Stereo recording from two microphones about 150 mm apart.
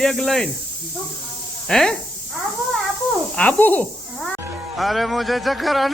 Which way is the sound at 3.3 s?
10° left (ahead or behind).